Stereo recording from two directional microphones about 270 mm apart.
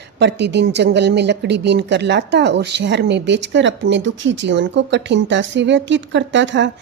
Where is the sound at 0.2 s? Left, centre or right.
Right.